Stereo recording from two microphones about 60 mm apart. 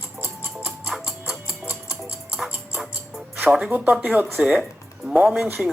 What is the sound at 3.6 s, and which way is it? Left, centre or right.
Speech, right.